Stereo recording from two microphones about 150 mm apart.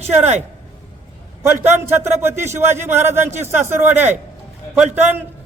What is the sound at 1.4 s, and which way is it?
A man's voice, 15° right (ahead or behind).